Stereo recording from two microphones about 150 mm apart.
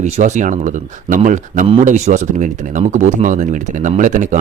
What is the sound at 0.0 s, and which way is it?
Speech, 50° right (ahead or behind).